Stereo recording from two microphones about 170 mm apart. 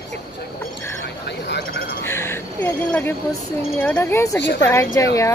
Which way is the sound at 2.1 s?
15° left (ahead or behind).